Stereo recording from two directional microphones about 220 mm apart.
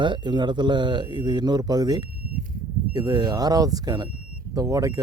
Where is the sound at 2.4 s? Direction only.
40° right (ahead or behind).